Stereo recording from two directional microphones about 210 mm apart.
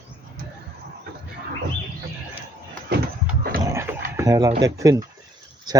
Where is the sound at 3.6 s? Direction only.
15° right (ahead or behind).